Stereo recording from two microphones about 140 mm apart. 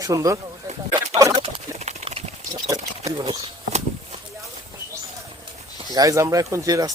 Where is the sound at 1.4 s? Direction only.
50° right (ahead or behind).